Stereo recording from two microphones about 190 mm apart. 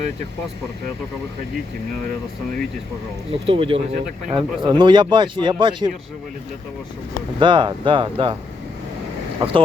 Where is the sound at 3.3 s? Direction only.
30° right (ahead or behind).